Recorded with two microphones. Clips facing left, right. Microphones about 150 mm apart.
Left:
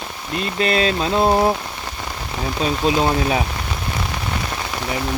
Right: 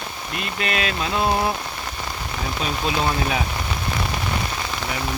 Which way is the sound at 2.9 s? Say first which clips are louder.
Left 5 dB; 30° left (ahead or behind).